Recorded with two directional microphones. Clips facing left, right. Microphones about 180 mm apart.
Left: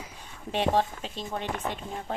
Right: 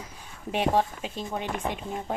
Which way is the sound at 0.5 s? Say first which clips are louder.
Right 1 dB; 10° right (ahead or behind).